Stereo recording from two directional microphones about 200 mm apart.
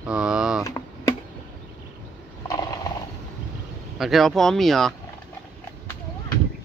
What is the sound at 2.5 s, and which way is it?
Mechanisms, 20° left (ahead or behind).